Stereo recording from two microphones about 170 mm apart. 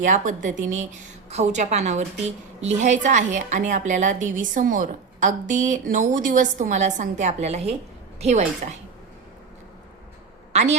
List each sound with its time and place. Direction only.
0.0 s a woman's voice: 45° right (ahead or behind)
10.5 s a woman's voice: 40° right (ahead or behind)